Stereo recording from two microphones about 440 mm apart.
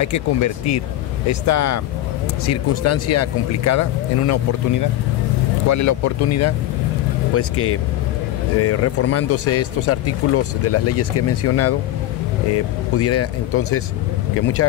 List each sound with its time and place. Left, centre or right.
0.0 s speech: left
13.0 s speech: left